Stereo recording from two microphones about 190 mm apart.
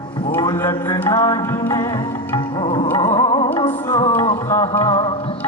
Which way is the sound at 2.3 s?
30° left (ahead or behind).